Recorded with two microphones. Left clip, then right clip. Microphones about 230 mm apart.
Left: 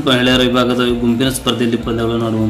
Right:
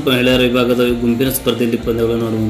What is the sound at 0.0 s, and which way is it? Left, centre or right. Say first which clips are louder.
A man's voice: even; centre.